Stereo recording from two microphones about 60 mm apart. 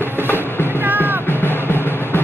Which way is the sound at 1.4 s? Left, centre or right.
Left.